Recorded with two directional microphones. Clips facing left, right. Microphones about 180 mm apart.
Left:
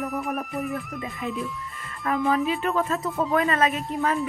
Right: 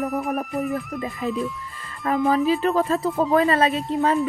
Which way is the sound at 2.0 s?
30° right (ahead or behind).